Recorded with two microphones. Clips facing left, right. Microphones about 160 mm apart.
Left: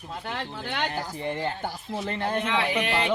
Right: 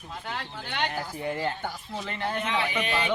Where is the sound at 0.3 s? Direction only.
45° left (ahead or behind).